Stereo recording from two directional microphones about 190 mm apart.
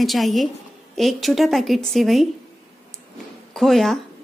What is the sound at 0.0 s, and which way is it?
A woman's voice, centre (ahead or behind).